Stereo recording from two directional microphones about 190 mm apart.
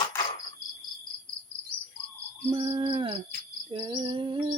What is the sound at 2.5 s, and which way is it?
Cricket, 30° right (ahead or behind).